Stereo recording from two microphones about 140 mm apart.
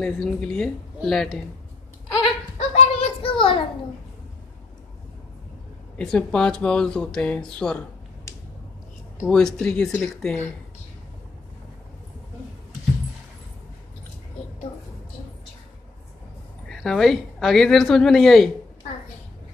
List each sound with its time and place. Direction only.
0.0 s a woman's voice: 5° left (ahead or behind)
2.5 s a sound: 45° left (ahead or behind)
5.9 s speech: 5° left (ahead or behind)
9.3 s speech: 5° left (ahead or behind)
16.6 s a woman's voice: centre (ahead or behind)